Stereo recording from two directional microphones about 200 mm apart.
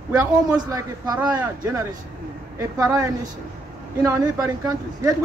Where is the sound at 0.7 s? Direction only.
20° right (ahead or behind).